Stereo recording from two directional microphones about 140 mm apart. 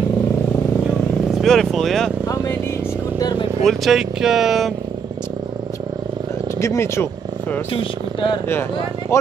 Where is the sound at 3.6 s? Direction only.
Centre (ahead or behind).